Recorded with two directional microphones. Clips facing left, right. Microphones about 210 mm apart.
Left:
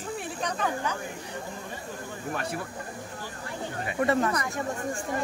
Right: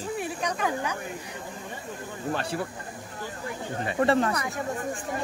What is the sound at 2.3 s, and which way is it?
Speech, 30° right (ahead or behind).